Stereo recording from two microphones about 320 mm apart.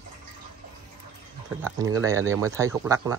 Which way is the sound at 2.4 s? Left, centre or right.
Centre.